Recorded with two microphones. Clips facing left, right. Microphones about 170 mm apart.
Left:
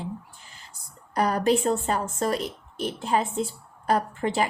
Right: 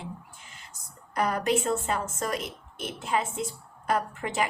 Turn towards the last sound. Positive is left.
turn(degrees=30)  # may be behind; listen again after turning